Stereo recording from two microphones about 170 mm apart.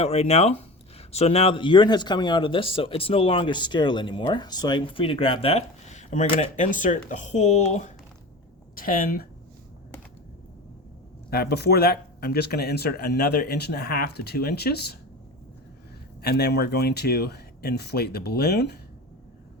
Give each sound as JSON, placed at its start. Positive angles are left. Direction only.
{"t": 0.0, "sound": "speech", "side_deg": 35}
{"t": 8.7, "sound": "speech", "side_deg": 55}
{"t": 11.3, "sound": "speech", "side_deg": 70}
{"t": 16.2, "sound": "speech", "side_deg": 70}